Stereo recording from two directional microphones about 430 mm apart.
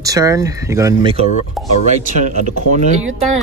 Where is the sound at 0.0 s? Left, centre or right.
Centre.